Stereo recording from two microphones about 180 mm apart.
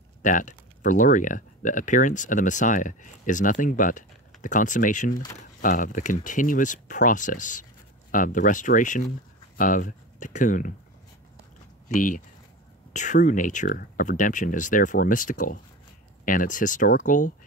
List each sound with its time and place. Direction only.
0.2 s speech: 45° left (ahead or behind)
5.1 s speech: 20° left (ahead or behind)
5.6 s speech: 45° left (ahead or behind)
11.9 s speech: 45° left (ahead or behind)